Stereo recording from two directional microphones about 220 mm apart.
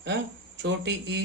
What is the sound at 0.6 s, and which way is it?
Speech, 50° right (ahead or behind).